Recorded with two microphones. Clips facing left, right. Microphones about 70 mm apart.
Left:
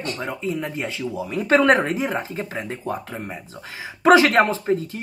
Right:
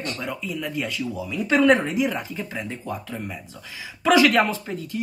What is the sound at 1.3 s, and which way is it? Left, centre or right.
Speech, left.